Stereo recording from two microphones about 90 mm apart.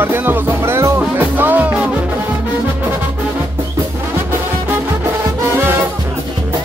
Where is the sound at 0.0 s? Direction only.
25° right (ahead or behind).